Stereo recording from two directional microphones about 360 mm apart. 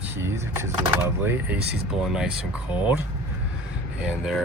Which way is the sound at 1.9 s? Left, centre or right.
Centre.